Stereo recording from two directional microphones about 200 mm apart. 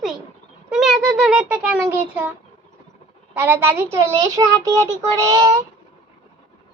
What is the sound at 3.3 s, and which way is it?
Child singing, 10° right (ahead or behind).